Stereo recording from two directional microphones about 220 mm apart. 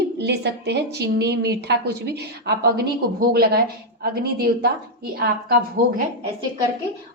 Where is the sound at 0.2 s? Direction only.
50° right (ahead or behind).